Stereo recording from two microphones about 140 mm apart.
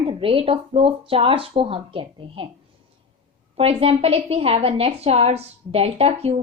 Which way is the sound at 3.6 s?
45° right (ahead or behind).